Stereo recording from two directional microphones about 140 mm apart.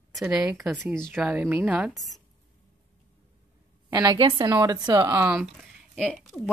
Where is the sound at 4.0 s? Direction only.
35° right (ahead or behind).